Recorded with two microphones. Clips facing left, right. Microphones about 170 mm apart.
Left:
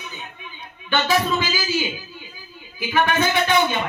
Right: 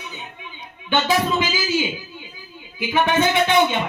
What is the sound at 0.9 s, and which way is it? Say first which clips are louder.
Speech: right 1 dB; 20° right (ahead or behind).